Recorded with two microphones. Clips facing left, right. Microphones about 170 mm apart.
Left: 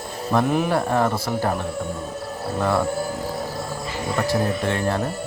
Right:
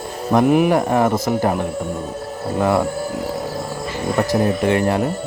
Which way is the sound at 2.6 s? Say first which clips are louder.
Right 4 dB; 10° right (ahead or behind).